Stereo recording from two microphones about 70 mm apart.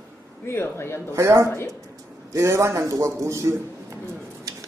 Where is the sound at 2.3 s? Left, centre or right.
Right.